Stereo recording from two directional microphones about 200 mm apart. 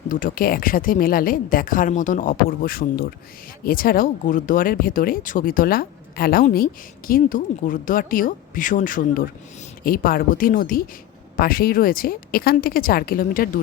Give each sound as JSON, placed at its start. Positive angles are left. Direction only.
{"t": 0.1, "sound": "speech", "side_deg": 45}